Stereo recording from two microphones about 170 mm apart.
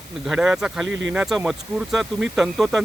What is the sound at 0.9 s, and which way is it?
Speech, 90° right.